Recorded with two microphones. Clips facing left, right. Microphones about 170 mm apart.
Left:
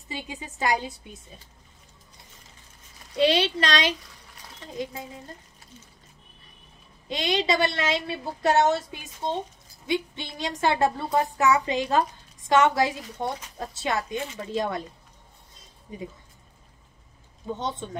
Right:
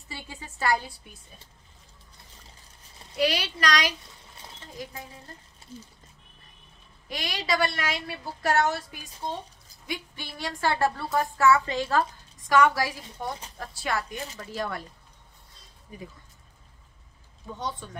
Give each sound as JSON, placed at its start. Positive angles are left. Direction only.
{"t": 0.1, "sound": "a woman's voice", "side_deg": 15}
{"t": 3.2, "sound": "a woman's voice", "side_deg": 25}
{"t": 7.1, "sound": "a woman's voice", "side_deg": 25}
{"t": 15.9, "sound": "a woman's voice", "side_deg": 20}
{"t": 17.5, "sound": "a woman's voice", "side_deg": 25}